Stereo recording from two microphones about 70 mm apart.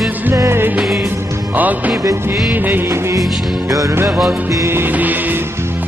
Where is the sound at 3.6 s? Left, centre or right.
Right.